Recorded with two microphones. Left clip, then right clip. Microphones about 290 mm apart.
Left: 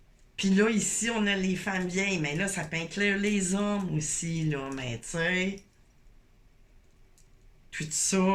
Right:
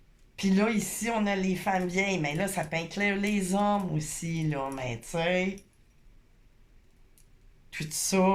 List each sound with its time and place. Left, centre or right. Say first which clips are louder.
0.3 s speech: left 2 dB; centre
7.7 s speech: even; centre